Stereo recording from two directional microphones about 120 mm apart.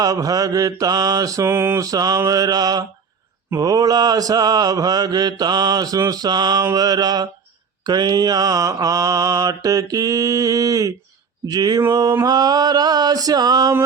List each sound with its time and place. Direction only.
0.0 s mantra: 30° right (ahead or behind)